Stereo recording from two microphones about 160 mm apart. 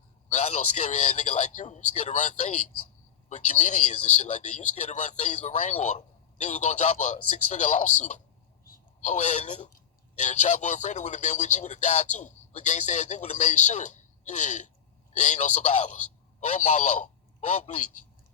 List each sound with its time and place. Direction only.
0.3 s a man's voice: 45° left (ahead or behind)